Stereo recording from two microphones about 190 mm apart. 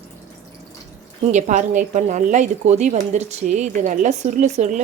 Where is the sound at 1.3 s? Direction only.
40° right (ahead or behind).